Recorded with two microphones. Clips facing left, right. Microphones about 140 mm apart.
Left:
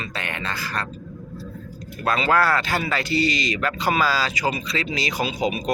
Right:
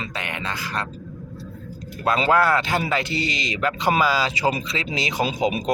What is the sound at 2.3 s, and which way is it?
Speech, 20° right (ahead or behind).